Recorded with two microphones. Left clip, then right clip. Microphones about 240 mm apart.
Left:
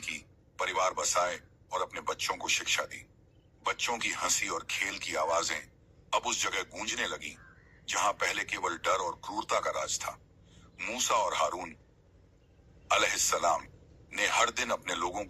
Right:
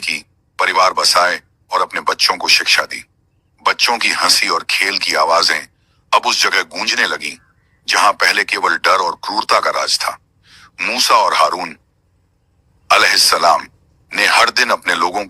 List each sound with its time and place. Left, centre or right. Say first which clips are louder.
0.0 s speech: right 18 dB; right
12.9 s speech: right 17 dB; right